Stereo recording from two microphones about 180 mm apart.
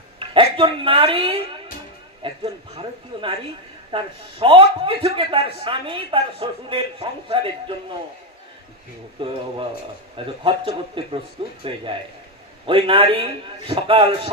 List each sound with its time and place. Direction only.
0.2 s a man's voice: 30° right (ahead or behind)
9.2 s a man's voice: 30° right (ahead or behind)